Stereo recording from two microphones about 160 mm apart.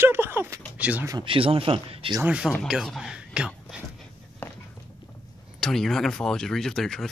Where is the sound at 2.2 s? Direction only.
5° right (ahead or behind).